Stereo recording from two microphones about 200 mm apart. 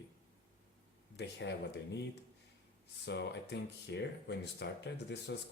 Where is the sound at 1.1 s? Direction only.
60° left (ahead or behind).